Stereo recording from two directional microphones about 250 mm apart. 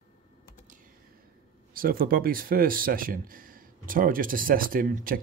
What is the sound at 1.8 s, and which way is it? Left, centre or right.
Speech, right.